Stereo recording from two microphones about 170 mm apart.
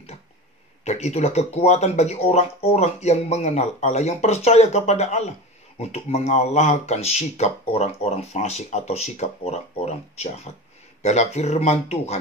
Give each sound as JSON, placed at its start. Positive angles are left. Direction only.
{"t": 0.8, "sound": "speech", "side_deg": 40}